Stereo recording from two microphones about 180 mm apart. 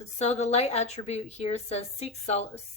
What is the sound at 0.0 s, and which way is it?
A woman's voice, 35° left (ahead or behind).